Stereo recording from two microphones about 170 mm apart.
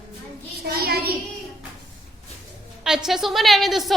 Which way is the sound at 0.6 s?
65° right (ahead or behind).